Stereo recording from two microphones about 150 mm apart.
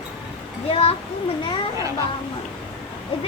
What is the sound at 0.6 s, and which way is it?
Speech, 40° left (ahead or behind).